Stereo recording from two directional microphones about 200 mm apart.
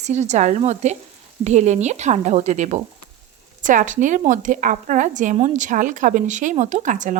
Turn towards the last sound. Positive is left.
turn(degrees=-40)  # may be behind; listen again after turning